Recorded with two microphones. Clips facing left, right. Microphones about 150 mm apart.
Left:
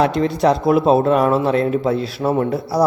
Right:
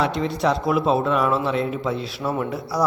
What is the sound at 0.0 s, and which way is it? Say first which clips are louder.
A man's voice: left 6 dB; 45° left (ahead or behind).